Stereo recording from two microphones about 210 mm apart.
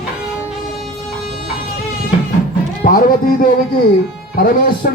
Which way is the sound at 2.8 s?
40° left (ahead or behind).